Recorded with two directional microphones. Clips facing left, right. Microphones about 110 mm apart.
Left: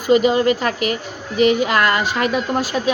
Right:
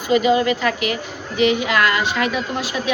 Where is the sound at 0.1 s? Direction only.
40° left (ahead or behind).